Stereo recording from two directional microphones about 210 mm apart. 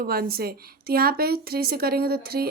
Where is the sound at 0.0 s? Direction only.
45° right (ahead or behind).